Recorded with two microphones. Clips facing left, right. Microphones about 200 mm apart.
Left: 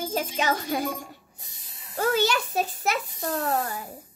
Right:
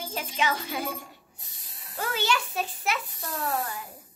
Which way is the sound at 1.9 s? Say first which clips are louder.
Left 5 dB; 45° left (ahead or behind).